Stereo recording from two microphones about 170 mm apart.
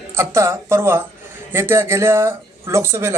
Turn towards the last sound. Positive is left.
turn(degrees=-15)  # may be behind; listen again after turning